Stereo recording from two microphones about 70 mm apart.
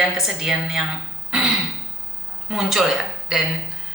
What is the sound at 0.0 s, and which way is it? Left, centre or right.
Speech, centre.